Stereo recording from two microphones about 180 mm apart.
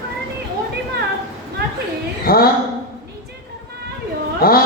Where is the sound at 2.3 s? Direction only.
55° left (ahead or behind).